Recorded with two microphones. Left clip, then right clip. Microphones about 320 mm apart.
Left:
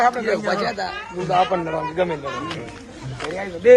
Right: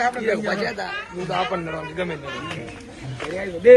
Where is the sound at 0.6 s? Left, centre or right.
Left.